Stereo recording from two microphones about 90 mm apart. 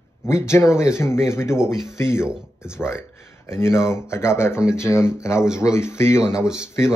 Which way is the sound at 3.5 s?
30° left (ahead or behind).